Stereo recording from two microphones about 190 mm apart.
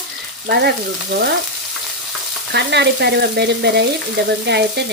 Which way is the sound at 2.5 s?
65° right (ahead or behind).